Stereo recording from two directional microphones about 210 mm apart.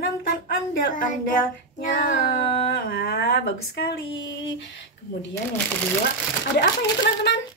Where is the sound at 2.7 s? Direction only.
50° left (ahead or behind).